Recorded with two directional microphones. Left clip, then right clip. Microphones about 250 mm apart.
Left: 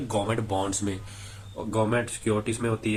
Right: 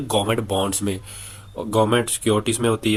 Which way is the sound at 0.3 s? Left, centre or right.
Right.